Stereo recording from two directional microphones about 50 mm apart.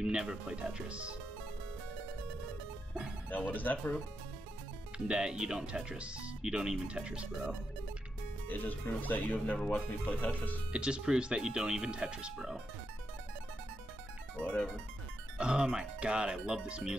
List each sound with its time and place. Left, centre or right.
0.0 s speech: centre
3.3 s speech: left
4.9 s speech: centre
5.9 s speech: right
8.5 s speech: left
10.7 s speech: centre
15.3 s speech: centre